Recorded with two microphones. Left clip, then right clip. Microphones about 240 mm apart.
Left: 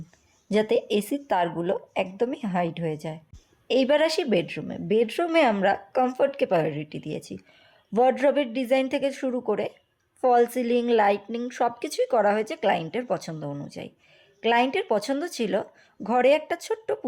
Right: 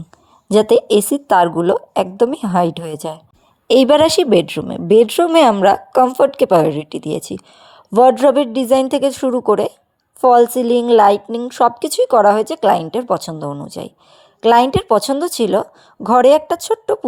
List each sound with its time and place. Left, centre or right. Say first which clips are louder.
0.4 s a woman's voice: right 11 dB; right